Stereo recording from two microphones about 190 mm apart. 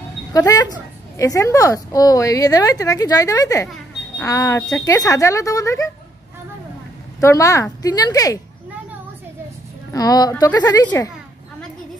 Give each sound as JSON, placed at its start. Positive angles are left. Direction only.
{"t": 0.3, "sound": "a woman's voice", "side_deg": 20}
{"t": 7.2, "sound": "a woman's voice", "side_deg": 15}
{"t": 9.9, "sound": "a woman's voice", "side_deg": 20}